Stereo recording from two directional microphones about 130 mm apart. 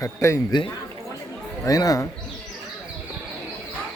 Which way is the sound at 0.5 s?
35° left (ahead or behind).